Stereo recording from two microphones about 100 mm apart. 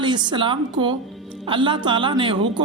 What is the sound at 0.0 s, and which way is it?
A woman's voice, 50° right (ahead or behind).